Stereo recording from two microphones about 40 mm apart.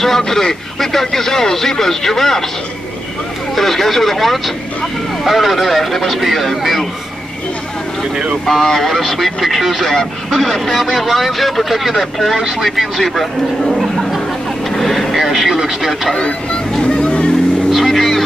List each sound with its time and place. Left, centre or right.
0.0 s speech: centre
3.5 s speech: centre
8.5 s speech: centre
14.7 s vehicle: centre
16.2 s speech: left
16.7 s vehicle: left
17.6 s vehicle: centre